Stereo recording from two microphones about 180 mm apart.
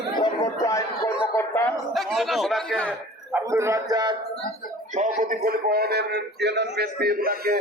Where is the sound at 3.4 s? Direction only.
15° right (ahead or behind).